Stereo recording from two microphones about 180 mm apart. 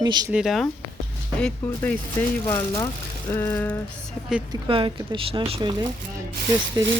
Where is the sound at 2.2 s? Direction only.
10° left (ahead or behind).